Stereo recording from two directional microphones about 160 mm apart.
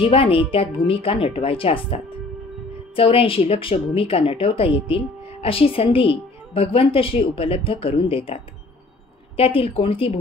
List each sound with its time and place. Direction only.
0.0 s a woman's voice: 35° left (ahead or behind)
3.0 s a woman's voice: 35° left (ahead or behind)
9.4 s a woman's voice: 35° left (ahead or behind)